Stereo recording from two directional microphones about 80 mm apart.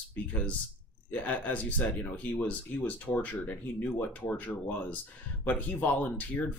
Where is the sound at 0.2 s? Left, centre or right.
Centre.